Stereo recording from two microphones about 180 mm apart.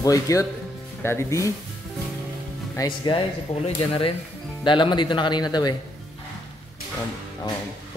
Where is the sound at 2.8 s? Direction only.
25° left (ahead or behind).